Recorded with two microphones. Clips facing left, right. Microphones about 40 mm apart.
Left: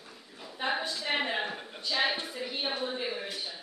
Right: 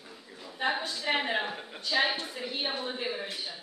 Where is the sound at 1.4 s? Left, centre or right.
Centre.